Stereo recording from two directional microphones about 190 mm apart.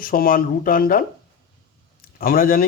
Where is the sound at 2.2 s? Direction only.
50° left (ahead or behind).